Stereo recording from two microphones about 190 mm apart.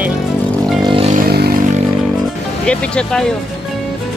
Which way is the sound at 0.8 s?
30° right (ahead or behind).